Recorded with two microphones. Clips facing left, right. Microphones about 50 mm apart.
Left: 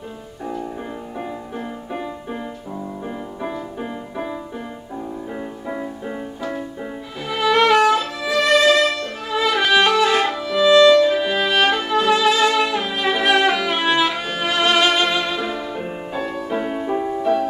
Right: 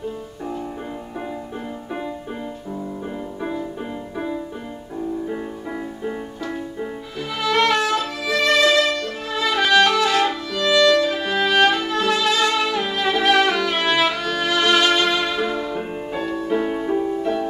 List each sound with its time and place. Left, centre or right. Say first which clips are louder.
5.3 s music: even; centre
7.3 s violin: left 4 dB; centre
8.3 s music: left 2 dB; centre
9.3 s violin: left 1 dB; centre
10.2 s music: left 4 dB; centre
16.9 s music: even; left
17.2 s music: left 4 dB; centre